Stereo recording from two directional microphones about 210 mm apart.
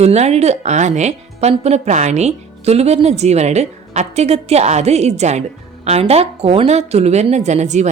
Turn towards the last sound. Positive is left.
turn(degrees=-35)  # may be behind; listen again after turning